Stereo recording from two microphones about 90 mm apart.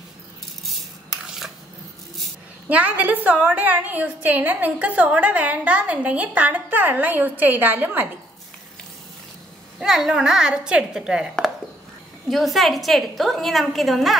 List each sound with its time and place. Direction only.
2.7 s a woman's voice: 20° right (ahead or behind)
9.8 s a woman's voice: 5° right (ahead or behind)
12.3 s a woman's voice: centre (ahead or behind)